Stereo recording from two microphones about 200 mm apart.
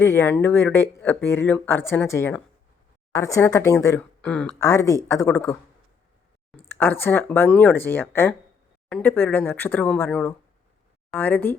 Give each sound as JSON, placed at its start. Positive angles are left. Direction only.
{"t": 0.0, "sound": "speech", "side_deg": 15}
{"t": 6.7, "sound": "speech", "side_deg": 10}